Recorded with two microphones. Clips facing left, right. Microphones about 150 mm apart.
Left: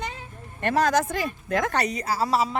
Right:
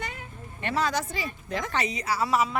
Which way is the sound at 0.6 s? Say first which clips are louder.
Left 6 dB; 50° left (ahead or behind).